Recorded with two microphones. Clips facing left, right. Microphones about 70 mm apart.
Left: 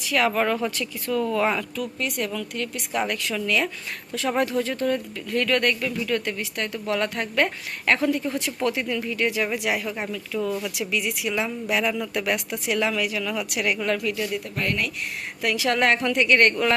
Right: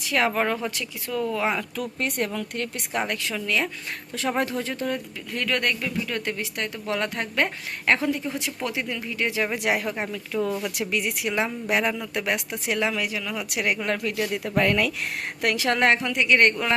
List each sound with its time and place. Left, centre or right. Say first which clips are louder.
0.1 s speech: left 1 dB; right
1.7 s speech: even; right
3.0 s speech: left 2 dB; centre
10.8 s speech: even; right
15.4 s speech: even; right
15.6 s speech: even; right
16.0 s speech: left 1 dB; centre